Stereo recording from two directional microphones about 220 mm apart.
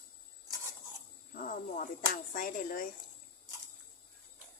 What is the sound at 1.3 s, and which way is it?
Speech, 40° left (ahead or behind).